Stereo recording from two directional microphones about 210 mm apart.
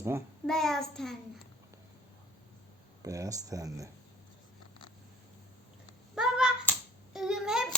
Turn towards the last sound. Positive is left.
turn(degrees=0)  # may be behind; listen again after turning